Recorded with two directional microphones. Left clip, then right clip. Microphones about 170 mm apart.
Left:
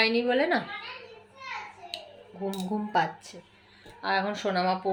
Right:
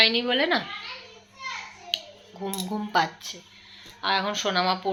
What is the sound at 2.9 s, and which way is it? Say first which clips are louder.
A woman's voice: right 3 dB; 5° left (ahead or behind).